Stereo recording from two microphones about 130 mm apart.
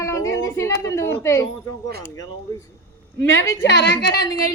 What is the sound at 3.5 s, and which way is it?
Speech, 30° left (ahead or behind).